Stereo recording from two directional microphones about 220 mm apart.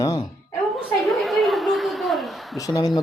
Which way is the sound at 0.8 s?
Centre (ahead or behind).